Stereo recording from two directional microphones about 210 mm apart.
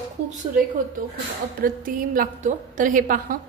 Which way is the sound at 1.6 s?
40° right (ahead or behind).